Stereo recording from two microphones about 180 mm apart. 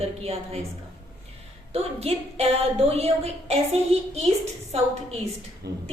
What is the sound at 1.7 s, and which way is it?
A woman's voice, 35° right (ahead or behind).